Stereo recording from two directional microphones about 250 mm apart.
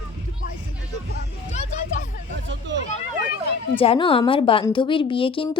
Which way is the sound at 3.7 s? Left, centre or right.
Left.